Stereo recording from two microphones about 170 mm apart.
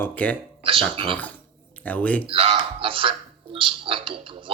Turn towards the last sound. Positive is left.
turn(degrees=-30)  # may be behind; listen again after turning